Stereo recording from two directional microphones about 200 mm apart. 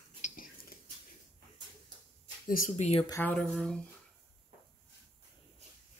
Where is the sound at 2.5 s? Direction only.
40° left (ahead or behind).